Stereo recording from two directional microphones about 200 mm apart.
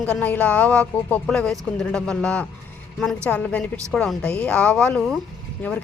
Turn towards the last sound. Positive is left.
turn(degrees=10)  # may be behind; listen again after turning